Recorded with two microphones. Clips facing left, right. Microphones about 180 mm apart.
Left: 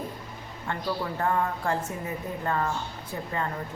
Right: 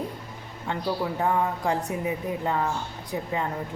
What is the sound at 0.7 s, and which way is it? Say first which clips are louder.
Speech: right 3 dB; 15° right (ahead or behind).